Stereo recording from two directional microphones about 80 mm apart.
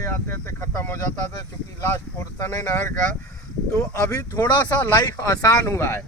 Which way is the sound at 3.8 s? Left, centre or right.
Left.